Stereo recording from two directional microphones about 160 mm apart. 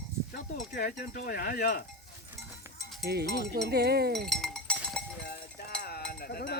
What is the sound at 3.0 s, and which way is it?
Speech, 85° right.